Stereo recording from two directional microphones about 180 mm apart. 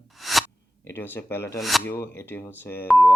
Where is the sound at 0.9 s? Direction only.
10° left (ahead or behind).